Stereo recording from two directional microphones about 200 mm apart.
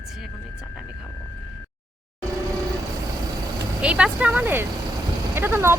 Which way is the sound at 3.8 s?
5° right (ahead or behind).